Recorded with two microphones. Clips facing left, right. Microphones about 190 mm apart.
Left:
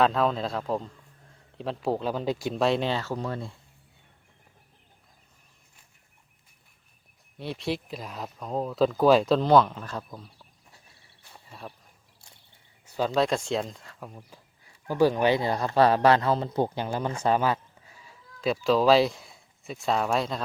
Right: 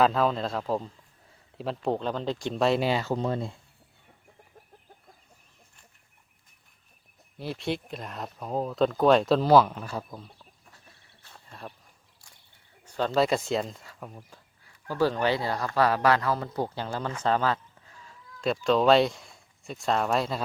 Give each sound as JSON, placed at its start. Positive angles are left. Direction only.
{"t": 0.0, "sound": "speech", "side_deg": 0}
{"t": 7.3, "sound": "speech", "side_deg": 0}
{"t": 11.2, "sound": "cricket", "side_deg": 10}
{"t": 12.8, "sound": "a sound", "side_deg": 10}
{"t": 13.2, "sound": "speech", "side_deg": -5}
{"t": 14.6, "sound": "speech", "side_deg": 15}
{"t": 17.2, "sound": "sheep", "side_deg": 15}
{"t": 18.3, "sound": "speech", "side_deg": 0}